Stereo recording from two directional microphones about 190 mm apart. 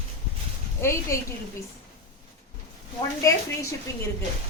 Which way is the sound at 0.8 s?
15° left (ahead or behind).